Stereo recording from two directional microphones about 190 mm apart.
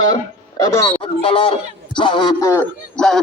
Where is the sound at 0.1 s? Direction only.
15° left (ahead or behind).